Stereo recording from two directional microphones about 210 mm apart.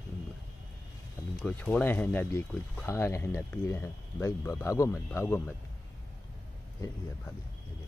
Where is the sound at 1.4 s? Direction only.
5° left (ahead or behind).